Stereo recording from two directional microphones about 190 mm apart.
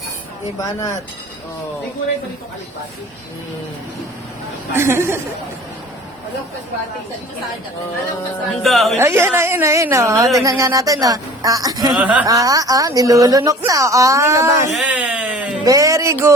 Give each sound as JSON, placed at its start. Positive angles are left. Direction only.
{"t": 0.6, "sound": "speech", "side_deg": 15}
{"t": 4.7, "sound": "speech", "side_deg": -15}
{"t": 8.6, "sound": "speech", "side_deg": 0}
{"t": 9.0, "sound": "speech", "side_deg": -15}
{"t": 11.9, "sound": "speech", "side_deg": -5}
{"t": 12.3, "sound": "speech", "side_deg": -20}
{"t": 14.7, "sound": "a sound", "side_deg": -5}
{"t": 15.6, "sound": "speech", "side_deg": -15}